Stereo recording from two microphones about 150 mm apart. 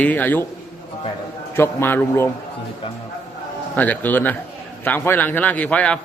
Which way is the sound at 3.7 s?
10° left (ahead or behind).